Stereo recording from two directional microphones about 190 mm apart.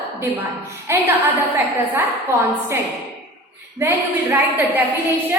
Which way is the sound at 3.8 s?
10° right (ahead or behind).